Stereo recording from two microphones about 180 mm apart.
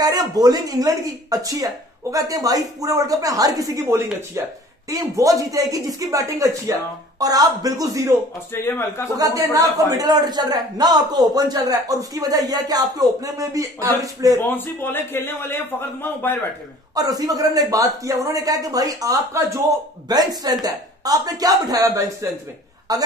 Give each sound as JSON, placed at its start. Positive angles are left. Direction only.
{"t": 0.0, "sound": "speech", "side_deg": -20}
{"t": 8.5, "sound": "a man's voice", "side_deg": 15}
{"t": 9.1, "sound": "speech", "side_deg": -20}
{"t": 14.5, "sound": "a man's voice", "side_deg": 10}
{"t": 16.9, "sound": "speech", "side_deg": -20}